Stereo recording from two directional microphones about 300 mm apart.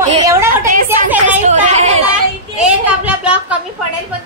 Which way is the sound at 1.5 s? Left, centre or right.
Right.